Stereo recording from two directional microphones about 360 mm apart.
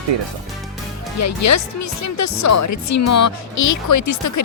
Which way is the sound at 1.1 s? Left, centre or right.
Left.